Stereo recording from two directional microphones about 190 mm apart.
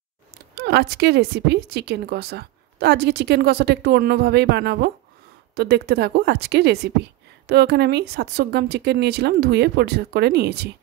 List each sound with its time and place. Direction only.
0.6 s a woman's voice: 60° right (ahead or behind)